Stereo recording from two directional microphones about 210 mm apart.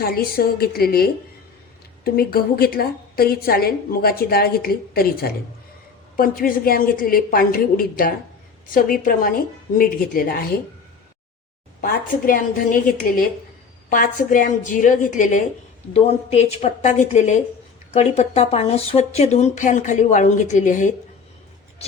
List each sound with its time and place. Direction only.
0.0 s a woman's voice: 45° left (ahead or behind)
6.1 s a woman's voice: 45° left (ahead or behind)
11.8 s a woman's voice: 45° left (ahead or behind)